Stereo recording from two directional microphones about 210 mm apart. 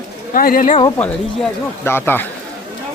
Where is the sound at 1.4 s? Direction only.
10° left (ahead or behind).